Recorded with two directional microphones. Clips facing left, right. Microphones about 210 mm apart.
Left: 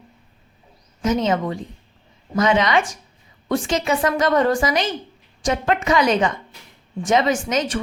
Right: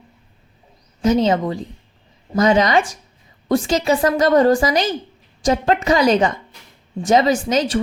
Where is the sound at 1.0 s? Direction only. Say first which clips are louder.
Right 4 dB; 35° right (ahead or behind).